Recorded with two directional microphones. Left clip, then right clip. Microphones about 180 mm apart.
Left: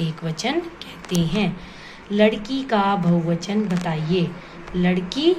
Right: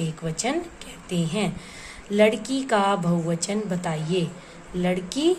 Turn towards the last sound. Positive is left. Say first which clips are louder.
# left 3 dB
turn(degrees=-55)  # may be behind; listen again after turning